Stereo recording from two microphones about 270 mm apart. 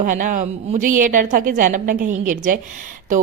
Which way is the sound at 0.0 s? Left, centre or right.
Right.